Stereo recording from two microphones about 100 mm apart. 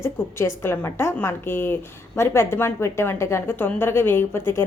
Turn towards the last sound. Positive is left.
turn(degrees=25)  # may be behind; listen again after turning